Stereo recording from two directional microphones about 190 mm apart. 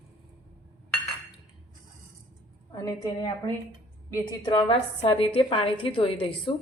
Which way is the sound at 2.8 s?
20° left (ahead or behind).